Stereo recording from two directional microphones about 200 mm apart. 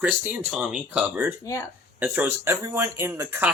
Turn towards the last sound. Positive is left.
turn(degrees=-10)  # may be behind; listen again after turning